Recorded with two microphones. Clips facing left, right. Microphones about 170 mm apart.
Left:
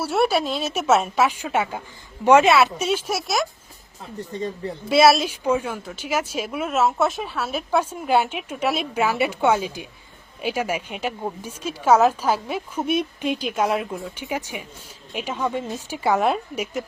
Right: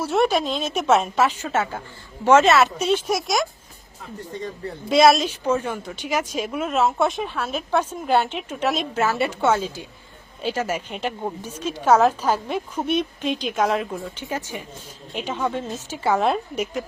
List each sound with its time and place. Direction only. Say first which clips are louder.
0.0 s a woman's voice: even; 10° left (ahead or behind)
4.9 s a woman's voice: even; 5° left (ahead or behind)